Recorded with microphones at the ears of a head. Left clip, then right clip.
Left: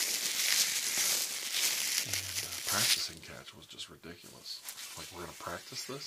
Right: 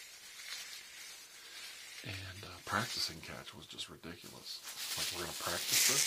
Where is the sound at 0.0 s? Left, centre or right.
Left.